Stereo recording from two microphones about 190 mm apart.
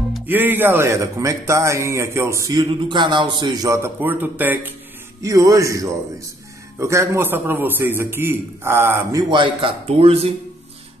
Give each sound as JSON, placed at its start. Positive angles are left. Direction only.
{"t": 0.3, "sound": "a man's voice", "side_deg": -10}
{"t": 9.3, "sound": "speech", "side_deg": -25}